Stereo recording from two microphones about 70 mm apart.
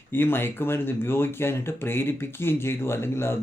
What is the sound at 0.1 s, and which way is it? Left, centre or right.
Speech, left.